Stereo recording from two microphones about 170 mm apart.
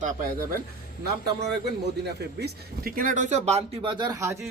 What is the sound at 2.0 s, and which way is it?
A man's voice, 65° right (ahead or behind).